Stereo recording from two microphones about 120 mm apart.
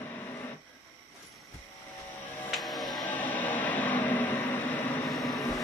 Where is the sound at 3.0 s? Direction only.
15° left (ahead or behind).